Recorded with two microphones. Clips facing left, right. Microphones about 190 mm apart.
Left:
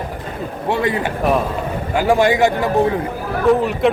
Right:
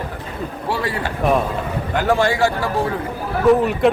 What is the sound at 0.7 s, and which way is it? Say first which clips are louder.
A man's voice: left 5 dB; 20° left (ahead or behind).